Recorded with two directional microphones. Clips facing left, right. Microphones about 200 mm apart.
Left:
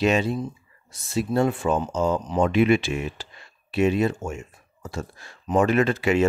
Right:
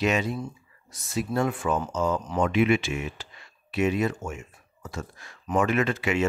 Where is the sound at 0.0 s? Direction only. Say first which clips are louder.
Left 4 dB; 30° left (ahead or behind).